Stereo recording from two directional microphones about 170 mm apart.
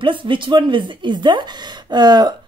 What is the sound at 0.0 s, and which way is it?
Speech, 30° right (ahead or behind).